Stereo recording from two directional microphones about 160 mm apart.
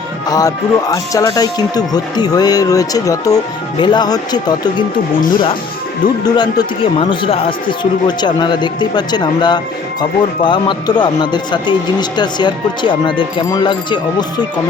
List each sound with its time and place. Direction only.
0.3 s speech: 20° left (ahead or behind)
6.2 s speech: 25° left (ahead or behind)